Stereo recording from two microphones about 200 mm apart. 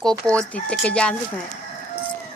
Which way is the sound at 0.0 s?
5° left (ahead or behind).